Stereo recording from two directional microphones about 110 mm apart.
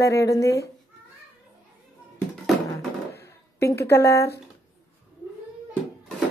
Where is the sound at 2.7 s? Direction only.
25° left (ahead or behind).